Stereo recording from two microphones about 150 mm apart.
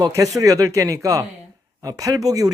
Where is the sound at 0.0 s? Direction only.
25° right (ahead or behind).